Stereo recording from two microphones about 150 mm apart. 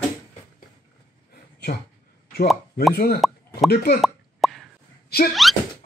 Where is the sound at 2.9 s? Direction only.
90° left.